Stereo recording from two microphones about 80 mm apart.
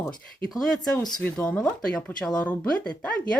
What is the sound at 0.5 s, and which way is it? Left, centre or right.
Speech, centre.